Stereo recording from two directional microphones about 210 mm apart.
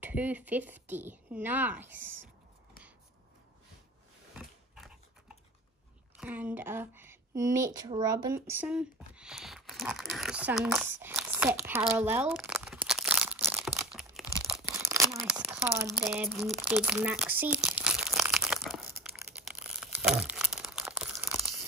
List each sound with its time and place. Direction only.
0.0 s speech: 10° right (ahead or behind)
4.4 s biting: centre (ahead or behind)
6.1 s speech: 5° right (ahead or behind)
12.3 s crumpling: 10° right (ahead or behind)
13.8 s crunch: centre (ahead or behind)
14.8 s a sound: 50° left (ahead or behind)
15.2 s crumpling: 5° right (ahead or behind)
19.0 s crushing: 10° right (ahead or behind)
19.4 s crumpling: 5° right (ahead or behind)